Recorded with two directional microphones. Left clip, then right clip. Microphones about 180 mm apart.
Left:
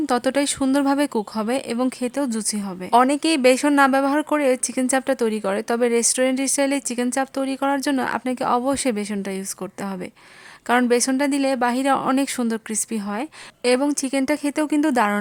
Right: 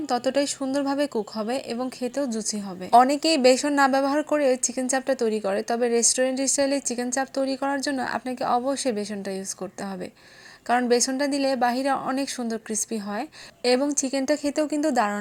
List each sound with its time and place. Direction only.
0.0 s speech: 20° left (ahead or behind)
10.7 s speech: 15° left (ahead or behind)